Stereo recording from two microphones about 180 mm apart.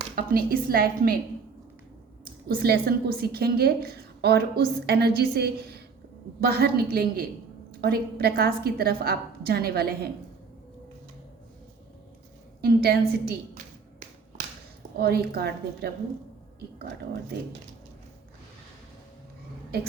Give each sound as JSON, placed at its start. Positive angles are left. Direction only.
{"t": 0.2, "sound": "a woman's voice", "side_deg": -55}
{"t": 2.2, "sound": "a woman's voice", "side_deg": -55}
{"t": 12.6, "sound": "a woman's voice", "side_deg": -60}
{"t": 14.9, "sound": "a woman's voice", "side_deg": -60}